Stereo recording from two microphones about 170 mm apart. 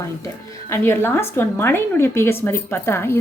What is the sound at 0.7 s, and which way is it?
A woman's voice, 15° left (ahead or behind).